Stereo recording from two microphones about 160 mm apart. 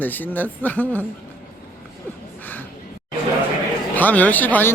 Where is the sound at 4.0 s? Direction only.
10° left (ahead or behind).